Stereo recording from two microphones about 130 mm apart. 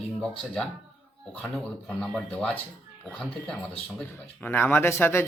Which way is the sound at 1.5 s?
Centre (ahead or behind).